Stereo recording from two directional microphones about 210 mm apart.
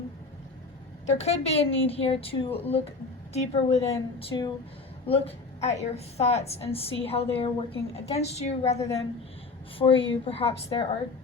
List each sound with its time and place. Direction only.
1.0 s a woman's voice: 30° left (ahead or behind)